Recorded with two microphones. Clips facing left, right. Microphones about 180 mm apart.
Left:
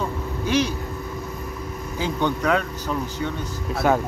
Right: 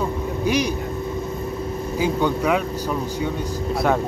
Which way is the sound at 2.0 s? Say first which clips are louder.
Right 2 dB; 10° right (ahead or behind).